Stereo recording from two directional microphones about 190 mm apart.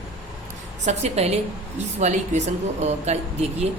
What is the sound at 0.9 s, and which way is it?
A woman's voice, 35° right (ahead or behind).